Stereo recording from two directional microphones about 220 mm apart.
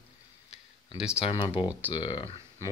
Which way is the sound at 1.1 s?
25° left (ahead or behind).